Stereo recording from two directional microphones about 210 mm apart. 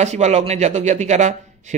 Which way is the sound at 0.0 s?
35° right (ahead or behind).